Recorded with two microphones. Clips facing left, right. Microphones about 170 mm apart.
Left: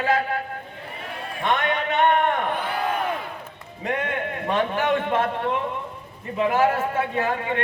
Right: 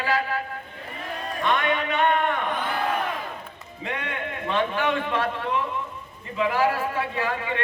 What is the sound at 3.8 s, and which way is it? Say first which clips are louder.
A man's voice: left 5 dB; 45° left (ahead or behind).